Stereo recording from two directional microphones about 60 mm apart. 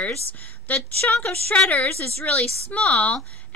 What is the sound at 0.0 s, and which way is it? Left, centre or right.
A woman's voice, left.